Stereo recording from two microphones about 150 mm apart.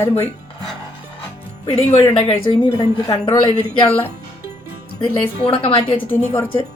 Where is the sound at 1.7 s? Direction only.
45° left (ahead or behind).